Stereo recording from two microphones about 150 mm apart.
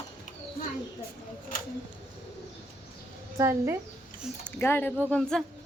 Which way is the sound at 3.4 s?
20° right (ahead or behind).